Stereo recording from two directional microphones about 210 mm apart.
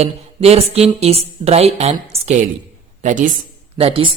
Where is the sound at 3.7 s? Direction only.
25° right (ahead or behind).